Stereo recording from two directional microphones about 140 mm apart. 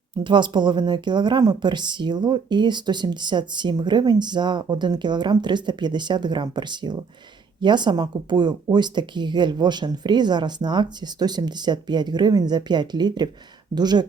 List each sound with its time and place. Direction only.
0.3 s speech: 35° right (ahead or behind)